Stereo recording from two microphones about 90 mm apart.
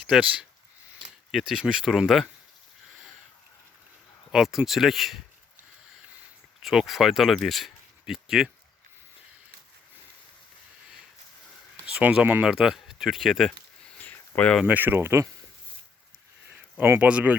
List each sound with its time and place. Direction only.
0.0 s speech: 10° right (ahead or behind)
4.3 s speech: 5° right (ahead or behind)
6.6 s speech: centre (ahead or behind)
11.9 s speech: 15° right (ahead or behind); by 13.6 s 5° left (ahead or behind)
14.0 s a sound: 20° left (ahead or behind)
14.8 s speech: 25° right (ahead or behind)
16.5 s a sound: 20° right (ahead or behind)
17.0 s speech: 15° right (ahead or behind)